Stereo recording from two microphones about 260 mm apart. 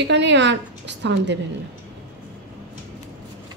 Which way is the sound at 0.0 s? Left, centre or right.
Right.